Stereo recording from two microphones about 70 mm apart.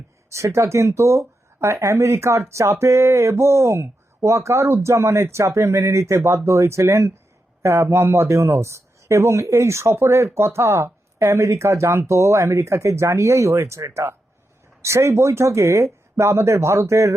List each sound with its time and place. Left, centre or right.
0.3 s speech: right